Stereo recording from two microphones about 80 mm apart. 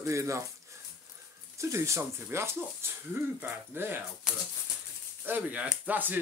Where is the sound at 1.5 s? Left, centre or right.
Right.